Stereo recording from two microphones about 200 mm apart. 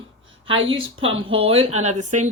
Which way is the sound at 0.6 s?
25° right (ahead or behind).